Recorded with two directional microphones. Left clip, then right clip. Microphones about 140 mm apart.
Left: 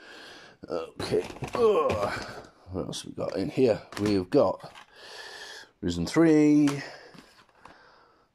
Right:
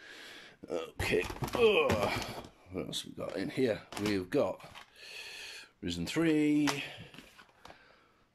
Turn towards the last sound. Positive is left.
turn(degrees=-15)  # may be behind; listen again after turning